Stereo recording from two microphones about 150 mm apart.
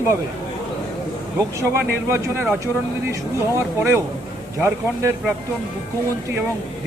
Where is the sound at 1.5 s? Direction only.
20° right (ahead or behind).